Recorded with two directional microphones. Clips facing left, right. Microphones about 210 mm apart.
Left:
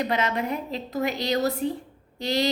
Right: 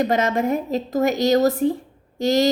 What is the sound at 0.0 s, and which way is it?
A woman's voice, 45° right (ahead or behind).